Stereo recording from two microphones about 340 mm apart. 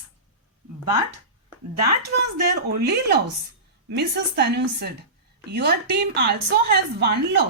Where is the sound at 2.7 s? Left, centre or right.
Right.